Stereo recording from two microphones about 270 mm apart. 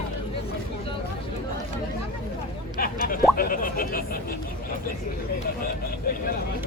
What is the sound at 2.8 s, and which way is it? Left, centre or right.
Speech, left.